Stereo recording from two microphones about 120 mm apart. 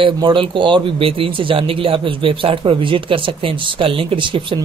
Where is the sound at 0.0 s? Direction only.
45° right (ahead or behind).